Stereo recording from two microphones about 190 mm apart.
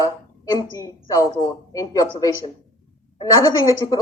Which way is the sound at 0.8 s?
15° left (ahead or behind).